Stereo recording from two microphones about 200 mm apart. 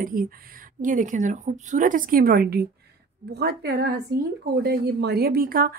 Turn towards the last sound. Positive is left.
turn(degrees=-45)  # may be behind; listen again after turning